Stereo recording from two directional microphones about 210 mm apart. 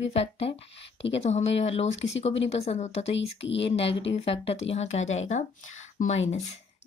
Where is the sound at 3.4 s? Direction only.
60° left (ahead or behind).